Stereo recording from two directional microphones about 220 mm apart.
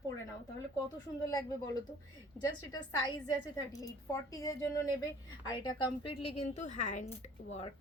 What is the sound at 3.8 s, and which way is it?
A woman's voice, 15° left (ahead or behind).